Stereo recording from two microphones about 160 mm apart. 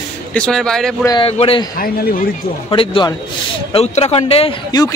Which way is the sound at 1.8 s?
65° left (ahead or behind).